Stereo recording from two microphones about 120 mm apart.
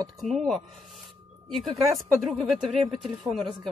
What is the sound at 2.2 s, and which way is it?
Speech, centre (ahead or behind).